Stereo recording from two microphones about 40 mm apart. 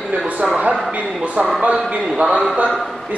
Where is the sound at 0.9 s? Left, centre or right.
Right.